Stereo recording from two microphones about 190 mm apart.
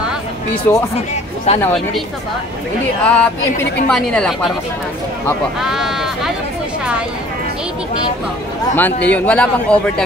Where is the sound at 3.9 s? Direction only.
5° left (ahead or behind).